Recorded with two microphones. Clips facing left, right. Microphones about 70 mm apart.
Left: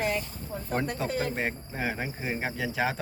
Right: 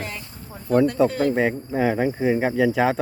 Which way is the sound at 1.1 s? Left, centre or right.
Right.